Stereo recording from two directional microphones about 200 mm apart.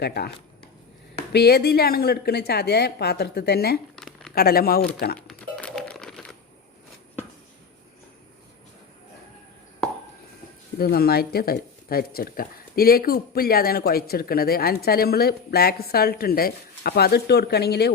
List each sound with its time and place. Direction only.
0.0 s speech: 55° left (ahead or behind)
3.9 s a sound: centre (ahead or behind)
4.4 s speech: 50° left (ahead or behind)
5.3 s typing: 5° left (ahead or behind)
10.8 s speech: 50° left (ahead or behind)